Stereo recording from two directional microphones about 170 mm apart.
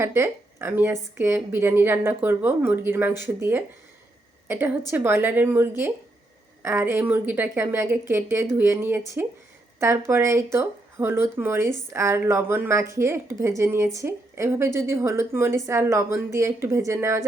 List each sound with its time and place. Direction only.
0.0 s a woman's voice: 15° right (ahead or behind)